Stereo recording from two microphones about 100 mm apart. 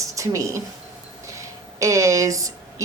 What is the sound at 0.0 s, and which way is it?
A woman's voice, 30° right (ahead or behind).